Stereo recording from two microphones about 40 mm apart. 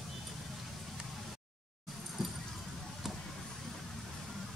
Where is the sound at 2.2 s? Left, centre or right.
Centre.